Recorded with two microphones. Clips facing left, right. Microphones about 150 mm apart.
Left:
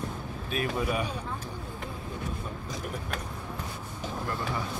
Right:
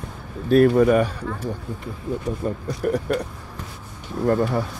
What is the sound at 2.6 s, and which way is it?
Speech, 75° right (ahead or behind).